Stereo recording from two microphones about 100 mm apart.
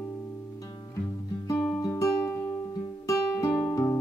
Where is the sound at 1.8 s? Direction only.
35° left (ahead or behind).